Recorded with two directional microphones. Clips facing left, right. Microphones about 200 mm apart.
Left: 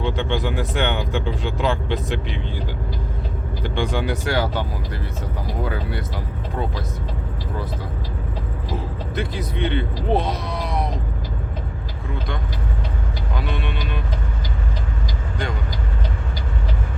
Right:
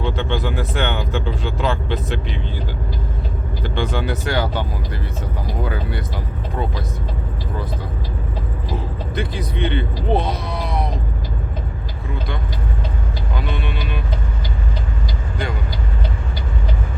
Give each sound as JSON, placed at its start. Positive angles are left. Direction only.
{"t": 0.0, "sound": "speech", "side_deg": 15}
{"t": 3.6, "sound": "speech", "side_deg": 15}
{"t": 5.6, "sound": "speech", "side_deg": 0}
{"t": 8.7, "sound": "speech", "side_deg": 0}
{"t": 13.3, "sound": "vehicle", "side_deg": 0}